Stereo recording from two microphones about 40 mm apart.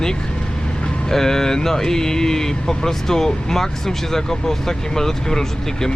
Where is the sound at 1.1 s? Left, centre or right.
Centre.